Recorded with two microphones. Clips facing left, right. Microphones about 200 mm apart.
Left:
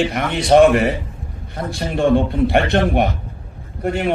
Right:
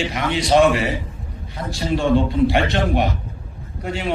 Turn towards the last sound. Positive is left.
turn(degrees=55)  # may be behind; listen again after turning